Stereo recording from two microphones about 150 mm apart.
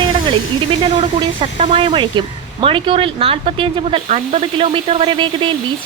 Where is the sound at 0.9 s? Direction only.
35° right (ahead or behind).